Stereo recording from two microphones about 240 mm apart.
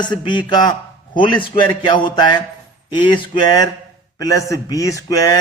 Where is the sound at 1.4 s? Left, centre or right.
Left.